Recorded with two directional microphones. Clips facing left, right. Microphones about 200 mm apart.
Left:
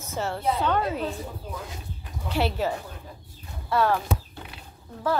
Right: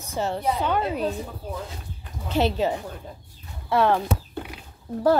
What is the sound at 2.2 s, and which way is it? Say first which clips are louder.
A woman's voice: right 3 dB; 20° right (ahead or behind).